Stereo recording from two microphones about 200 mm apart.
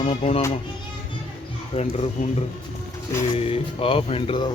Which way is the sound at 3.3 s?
30° left (ahead or behind).